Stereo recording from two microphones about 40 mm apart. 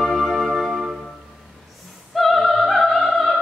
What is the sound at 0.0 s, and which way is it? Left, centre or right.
Music, centre.